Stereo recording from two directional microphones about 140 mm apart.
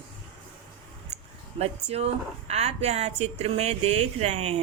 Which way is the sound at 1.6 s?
50° right (ahead or behind).